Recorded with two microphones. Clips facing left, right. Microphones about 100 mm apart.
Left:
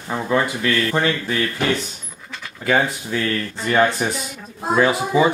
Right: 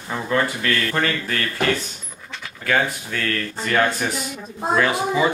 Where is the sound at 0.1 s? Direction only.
15° left (ahead or behind).